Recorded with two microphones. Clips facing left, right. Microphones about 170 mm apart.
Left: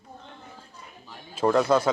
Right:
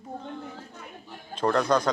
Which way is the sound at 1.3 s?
5° left (ahead or behind).